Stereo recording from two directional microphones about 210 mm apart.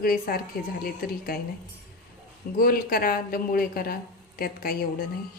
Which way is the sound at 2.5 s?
45° left (ahead or behind).